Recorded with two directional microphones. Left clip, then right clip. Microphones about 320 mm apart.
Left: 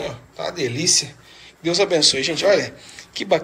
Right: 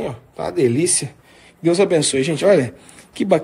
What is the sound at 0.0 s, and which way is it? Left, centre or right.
A man's voice, right.